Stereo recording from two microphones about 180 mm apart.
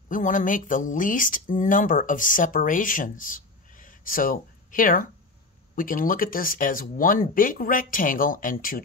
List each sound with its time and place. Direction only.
0.1 s speech: 45° left (ahead or behind)